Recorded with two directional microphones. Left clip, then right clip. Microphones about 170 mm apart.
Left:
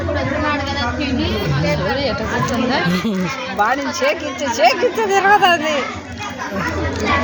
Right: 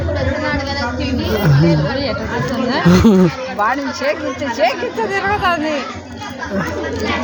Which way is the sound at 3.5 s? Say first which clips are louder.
Left 2 dB; 30° left (ahead or behind).